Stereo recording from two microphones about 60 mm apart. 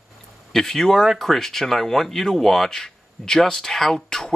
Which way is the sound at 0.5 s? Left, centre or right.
Centre.